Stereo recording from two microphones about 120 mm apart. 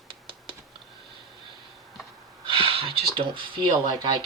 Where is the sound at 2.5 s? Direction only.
50° right (ahead or behind).